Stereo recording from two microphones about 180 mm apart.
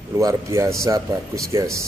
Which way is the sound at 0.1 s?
15° right (ahead or behind).